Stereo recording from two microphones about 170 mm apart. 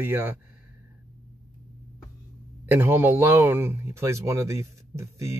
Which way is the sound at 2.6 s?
15° right (ahead or behind).